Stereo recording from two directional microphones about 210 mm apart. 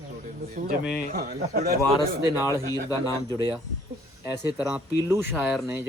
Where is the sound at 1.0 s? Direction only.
40° right (ahead or behind).